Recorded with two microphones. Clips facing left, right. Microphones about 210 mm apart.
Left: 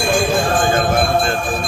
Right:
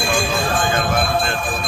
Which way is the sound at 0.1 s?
45° left (ahead or behind).